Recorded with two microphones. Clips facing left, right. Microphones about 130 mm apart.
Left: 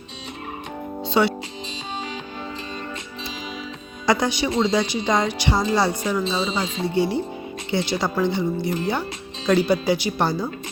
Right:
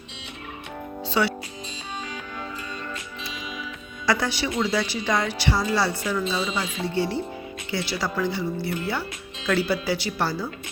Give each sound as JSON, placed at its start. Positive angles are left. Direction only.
{"t": 1.0, "sound": "music", "side_deg": 25}
{"t": 4.0, "sound": "speech", "side_deg": 20}